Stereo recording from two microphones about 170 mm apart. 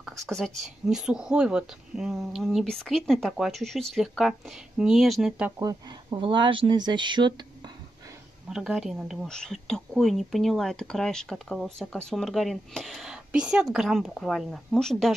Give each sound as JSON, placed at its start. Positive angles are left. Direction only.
{"t": 0.0, "sound": "speech", "side_deg": 0}
{"t": 5.6, "sound": "speech", "side_deg": -25}
{"t": 8.5, "sound": "speech", "side_deg": -5}